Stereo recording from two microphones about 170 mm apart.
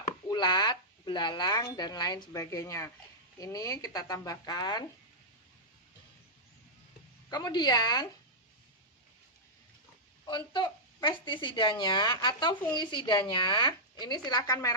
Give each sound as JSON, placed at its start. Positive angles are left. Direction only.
{"t": 0.3, "sound": "speech", "side_deg": 25}
{"t": 7.3, "sound": "speech", "side_deg": 25}
{"t": 10.2, "sound": "speech", "side_deg": 25}